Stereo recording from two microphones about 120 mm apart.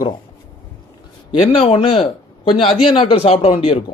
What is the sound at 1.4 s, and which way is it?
Speech, 55° left (ahead or behind).